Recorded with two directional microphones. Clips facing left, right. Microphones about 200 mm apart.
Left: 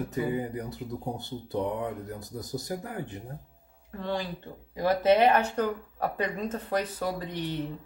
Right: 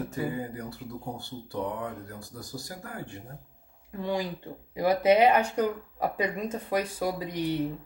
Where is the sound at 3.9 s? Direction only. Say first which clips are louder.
Right 2 dB; 10° right (ahead or behind).